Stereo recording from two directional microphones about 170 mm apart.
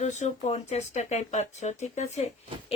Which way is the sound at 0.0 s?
40° left (ahead or behind).